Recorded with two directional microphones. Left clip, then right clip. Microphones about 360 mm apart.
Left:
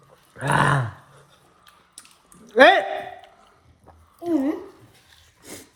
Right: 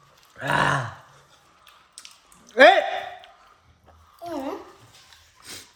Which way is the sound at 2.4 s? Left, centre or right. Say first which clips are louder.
Even; centre.